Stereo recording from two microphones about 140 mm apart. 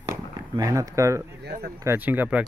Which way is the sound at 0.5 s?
25° right (ahead or behind).